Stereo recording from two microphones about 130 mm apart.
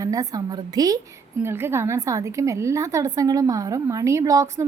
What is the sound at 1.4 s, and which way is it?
A woman's voice, 20° right (ahead or behind).